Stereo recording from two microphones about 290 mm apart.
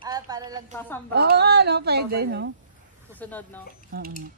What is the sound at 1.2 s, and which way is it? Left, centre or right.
A woman's voice, right.